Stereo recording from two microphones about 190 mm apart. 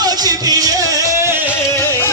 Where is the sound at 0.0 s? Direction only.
20° right (ahead or behind).